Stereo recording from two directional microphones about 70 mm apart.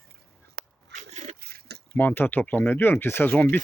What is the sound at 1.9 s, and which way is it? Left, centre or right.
Speech, left.